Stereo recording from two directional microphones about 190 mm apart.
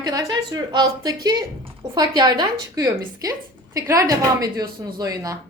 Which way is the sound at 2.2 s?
20° right (ahead or behind).